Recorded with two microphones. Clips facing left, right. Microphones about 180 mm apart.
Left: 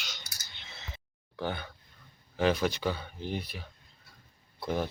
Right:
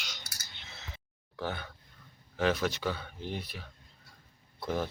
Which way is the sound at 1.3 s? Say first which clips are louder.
Left 2 dB; centre (ahead or behind).